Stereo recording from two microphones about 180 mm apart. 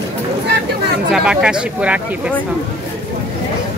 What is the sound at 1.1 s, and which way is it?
Speech, 5° right (ahead or behind).